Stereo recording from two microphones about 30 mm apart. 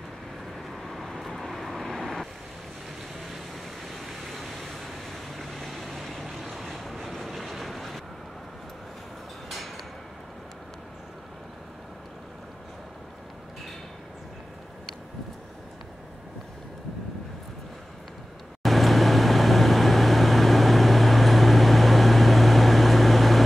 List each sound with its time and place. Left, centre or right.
0.9 s vehicle: centre
3.3 s vehicle: centre
18.6 s vehicle: centre